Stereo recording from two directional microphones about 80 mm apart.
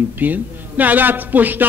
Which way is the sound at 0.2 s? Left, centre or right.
Right.